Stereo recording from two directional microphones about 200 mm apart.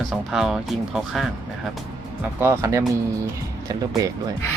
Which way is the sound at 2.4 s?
15° right (ahead or behind).